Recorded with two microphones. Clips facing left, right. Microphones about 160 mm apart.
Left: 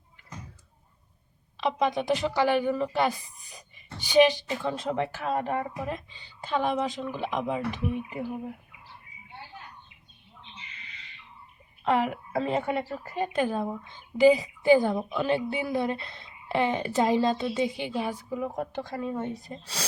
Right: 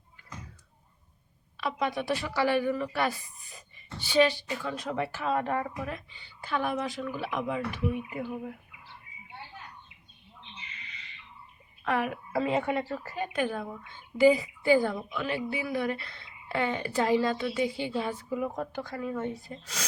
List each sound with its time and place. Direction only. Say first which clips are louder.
1.5 s a woman's voice: left 4 dB; 20° left (ahead or behind)
11.9 s a woman's voice: left 4 dB; 25° left (ahead or behind)
18.7 s a woman's voice: left 2 dB; 25° left (ahead or behind)